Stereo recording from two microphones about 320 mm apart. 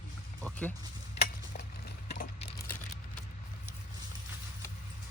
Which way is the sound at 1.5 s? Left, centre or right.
Left.